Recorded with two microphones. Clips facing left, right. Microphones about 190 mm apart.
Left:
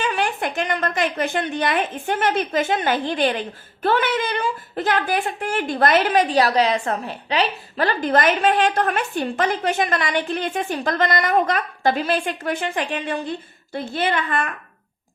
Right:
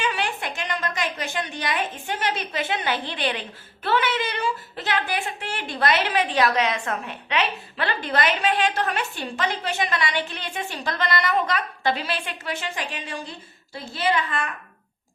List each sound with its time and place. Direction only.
0.0 s a woman's voice: 50° left (ahead or behind)